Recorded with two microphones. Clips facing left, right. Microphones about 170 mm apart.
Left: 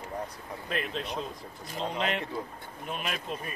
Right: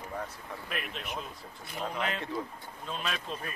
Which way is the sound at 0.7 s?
30° left (ahead or behind).